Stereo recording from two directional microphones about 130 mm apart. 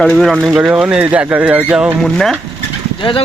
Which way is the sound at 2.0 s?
Centre (ahead or behind).